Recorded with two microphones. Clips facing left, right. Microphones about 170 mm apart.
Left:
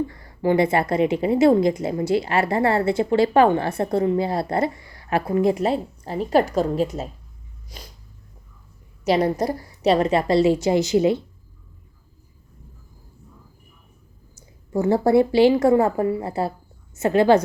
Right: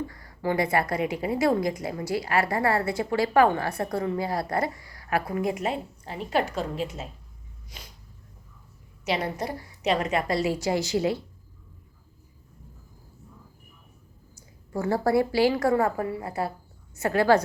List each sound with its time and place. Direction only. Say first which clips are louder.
0.1 s a woman's voice: left 7 dB; 25° left (ahead or behind)
7.7 s dog: left 5 dB; 35° left (ahead or behind)
9.0 s a woman's voice: left 9 dB; 40° left (ahead or behind); by 11.2 s 20° left (ahead or behind)
14.3 s a woman's voice: left 7 dB; 25° left (ahead or behind)